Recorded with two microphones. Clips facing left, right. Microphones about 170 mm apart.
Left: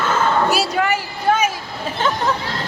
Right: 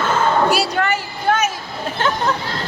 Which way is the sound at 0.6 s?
5° left (ahead or behind).